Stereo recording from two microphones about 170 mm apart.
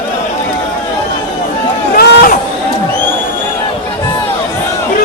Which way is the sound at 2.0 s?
65° left (ahead or behind).